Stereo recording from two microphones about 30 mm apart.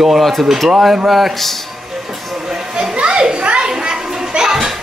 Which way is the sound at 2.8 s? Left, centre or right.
Right.